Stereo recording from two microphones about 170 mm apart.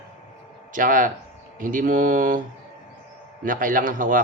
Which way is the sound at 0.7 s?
50° right (ahead or behind).